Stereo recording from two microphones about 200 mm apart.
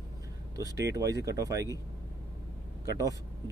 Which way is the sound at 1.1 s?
15° right (ahead or behind).